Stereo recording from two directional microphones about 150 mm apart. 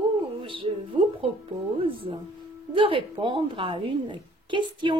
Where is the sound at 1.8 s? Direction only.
35° right (ahead or behind).